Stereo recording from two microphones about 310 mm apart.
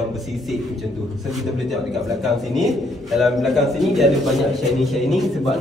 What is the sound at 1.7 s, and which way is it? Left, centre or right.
A man's voice, centre.